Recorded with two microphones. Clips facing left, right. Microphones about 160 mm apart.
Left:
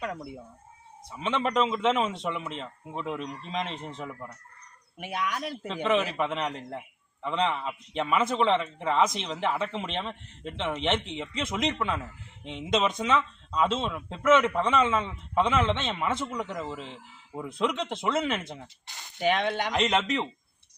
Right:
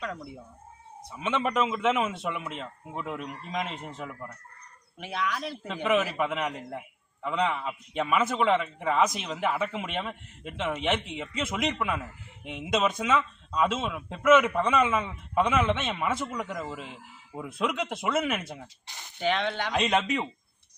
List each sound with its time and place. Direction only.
1.1 s a man's voice: 5° right (ahead or behind)
4.9 s speech: 15° left (ahead or behind)
5.6 s a man's voice: 5° right (ahead or behind)
18.9 s speech: 20° right (ahead or behind)
19.2 s speech: 15° left (ahead or behind)
20.0 s speech: 10° right (ahead or behind)